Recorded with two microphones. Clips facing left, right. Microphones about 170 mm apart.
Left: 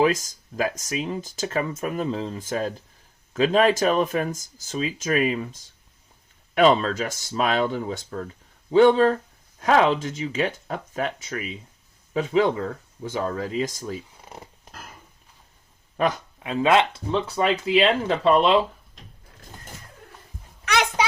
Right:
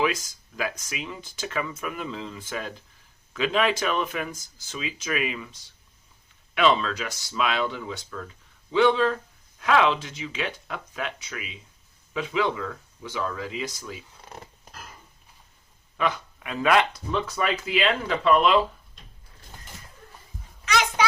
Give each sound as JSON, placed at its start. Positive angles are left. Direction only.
{"t": 0.0, "sound": "speech", "side_deg": 45}
{"t": 16.0, "sound": "speech", "side_deg": 40}
{"t": 16.4, "sound": "speech", "side_deg": 25}